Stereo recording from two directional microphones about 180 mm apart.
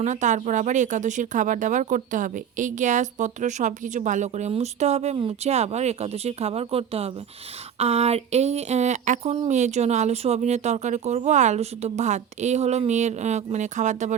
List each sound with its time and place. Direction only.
0.0 s speech: 45° right (ahead or behind)